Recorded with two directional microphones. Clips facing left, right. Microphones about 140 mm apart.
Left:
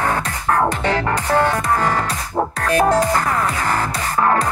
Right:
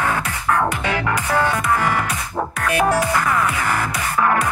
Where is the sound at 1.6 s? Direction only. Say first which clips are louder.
Left 1 dB; 40° left (ahead or behind).